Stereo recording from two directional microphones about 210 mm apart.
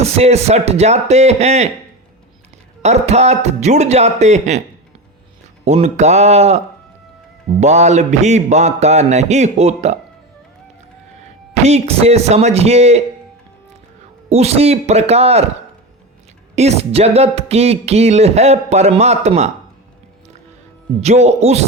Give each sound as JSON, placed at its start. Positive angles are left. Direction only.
{"t": 0.0, "sound": "speech", "side_deg": -30}
{"t": 2.8, "sound": "speech", "side_deg": -30}
{"t": 5.6, "sound": "speech", "side_deg": -35}
{"t": 7.6, "sound": "speech", "side_deg": -35}
{"t": 11.6, "sound": "speech", "side_deg": -30}
{"t": 14.3, "sound": "speech", "side_deg": -30}
{"t": 16.6, "sound": "speech", "side_deg": -30}
{"t": 21.0, "sound": "speech", "side_deg": -30}